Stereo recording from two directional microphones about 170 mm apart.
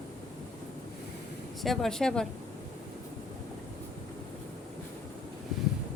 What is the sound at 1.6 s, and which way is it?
Speech, centre (ahead or behind).